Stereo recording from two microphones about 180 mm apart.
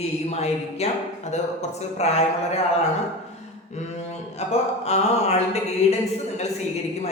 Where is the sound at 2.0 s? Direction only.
35° left (ahead or behind).